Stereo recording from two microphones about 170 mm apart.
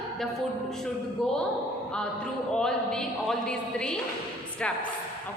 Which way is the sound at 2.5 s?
5° left (ahead or behind).